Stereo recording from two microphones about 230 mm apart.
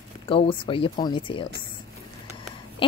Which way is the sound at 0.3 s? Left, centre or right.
Left.